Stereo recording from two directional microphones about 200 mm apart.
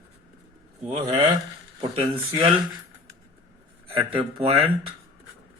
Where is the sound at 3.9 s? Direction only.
25° right (ahead or behind).